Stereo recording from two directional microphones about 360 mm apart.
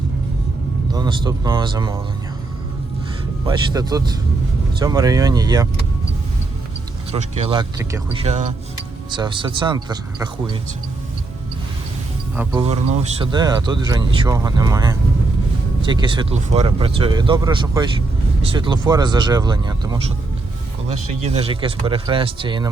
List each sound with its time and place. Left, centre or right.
0.9 s speech: centre
3.4 s speech: centre
7.1 s speech: centre
12.4 s speech: centre
21.2 s speech: centre